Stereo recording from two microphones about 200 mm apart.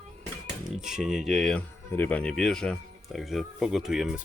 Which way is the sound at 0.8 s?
Centre (ahead or behind).